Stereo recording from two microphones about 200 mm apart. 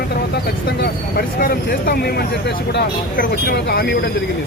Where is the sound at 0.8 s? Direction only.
50° left (ahead or behind).